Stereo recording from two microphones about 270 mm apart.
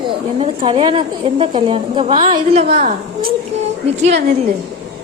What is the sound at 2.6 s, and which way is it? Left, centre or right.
Speech, right.